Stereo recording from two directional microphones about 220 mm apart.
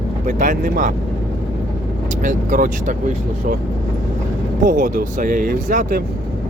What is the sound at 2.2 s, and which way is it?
Speech, 35° right (ahead or behind).